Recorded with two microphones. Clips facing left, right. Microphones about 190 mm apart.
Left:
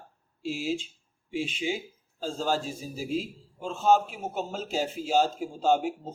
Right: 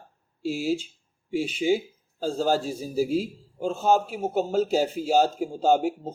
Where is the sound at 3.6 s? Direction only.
40° right (ahead or behind).